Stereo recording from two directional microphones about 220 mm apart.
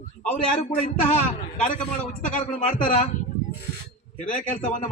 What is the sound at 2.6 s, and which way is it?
Speech, 35° left (ahead or behind).